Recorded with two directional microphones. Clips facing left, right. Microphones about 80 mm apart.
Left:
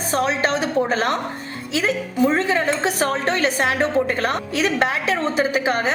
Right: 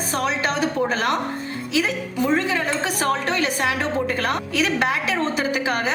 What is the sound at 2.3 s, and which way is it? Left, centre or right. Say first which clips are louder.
A woman's voice: left 2 dB; left.